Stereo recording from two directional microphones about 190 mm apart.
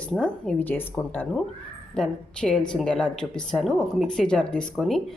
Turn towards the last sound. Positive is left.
turn(degrees=0)  # may be behind; listen again after turning